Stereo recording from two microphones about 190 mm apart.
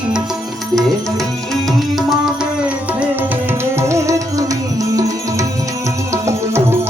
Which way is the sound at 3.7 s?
15° right (ahead or behind).